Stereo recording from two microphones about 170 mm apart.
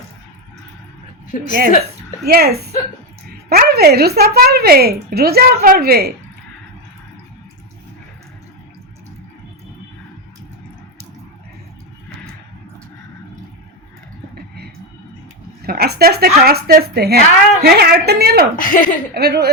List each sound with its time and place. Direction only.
1.3 s speech: 50° left (ahead or behind)
2.2 s a woman's voice: 65° right (ahead or behind)
15.6 s a sound: 65° right (ahead or behind)
16.4 s a woman's voice: 65° right (ahead or behind)
18.5 s speech: 55° left (ahead or behind)
19.1 s a woman's voice: 65° right (ahead or behind)